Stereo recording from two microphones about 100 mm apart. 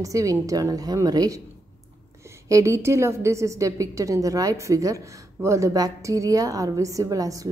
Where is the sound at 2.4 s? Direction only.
30° right (ahead or behind).